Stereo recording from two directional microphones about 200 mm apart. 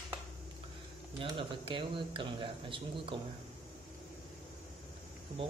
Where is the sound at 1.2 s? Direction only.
25° right (ahead or behind).